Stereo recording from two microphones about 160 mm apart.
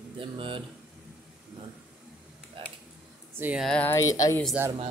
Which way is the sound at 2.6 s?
35° right (ahead or behind).